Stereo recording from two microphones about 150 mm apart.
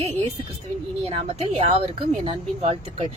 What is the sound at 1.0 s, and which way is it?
Speech, 40° right (ahead or behind).